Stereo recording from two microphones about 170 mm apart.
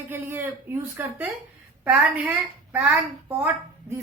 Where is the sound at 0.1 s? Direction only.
15° right (ahead or behind).